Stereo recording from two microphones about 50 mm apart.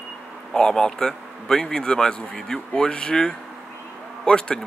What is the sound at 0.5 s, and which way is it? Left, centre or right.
A man's voice, centre.